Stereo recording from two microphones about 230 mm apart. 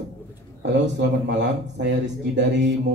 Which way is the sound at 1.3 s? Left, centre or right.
Right.